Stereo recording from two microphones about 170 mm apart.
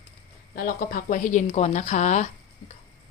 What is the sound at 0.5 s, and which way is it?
Speech, 55° left (ahead or behind).